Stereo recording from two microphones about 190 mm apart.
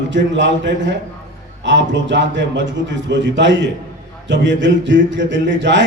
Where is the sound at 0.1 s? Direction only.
75° right (ahead or behind).